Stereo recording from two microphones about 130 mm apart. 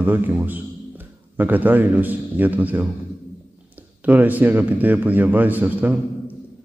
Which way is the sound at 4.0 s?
15° right (ahead or behind).